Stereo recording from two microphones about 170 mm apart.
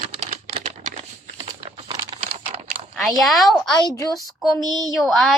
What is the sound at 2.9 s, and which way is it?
Speech, centre (ahead or behind).